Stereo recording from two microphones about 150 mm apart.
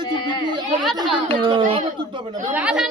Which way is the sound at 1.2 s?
35° right (ahead or behind).